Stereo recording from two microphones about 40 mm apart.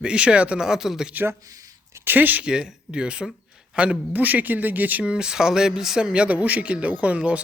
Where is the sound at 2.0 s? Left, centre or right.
Right.